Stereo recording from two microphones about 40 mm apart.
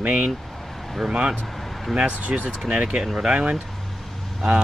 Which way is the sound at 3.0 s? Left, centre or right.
Centre.